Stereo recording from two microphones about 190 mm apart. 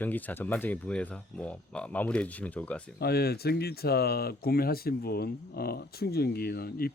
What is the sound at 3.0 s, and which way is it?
Speech, 55° left (ahead or behind).